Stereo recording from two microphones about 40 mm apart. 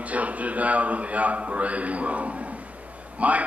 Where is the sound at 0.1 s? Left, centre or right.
Right.